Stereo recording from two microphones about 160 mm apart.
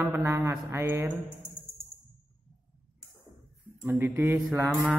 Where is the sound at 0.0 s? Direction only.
15° right (ahead or behind).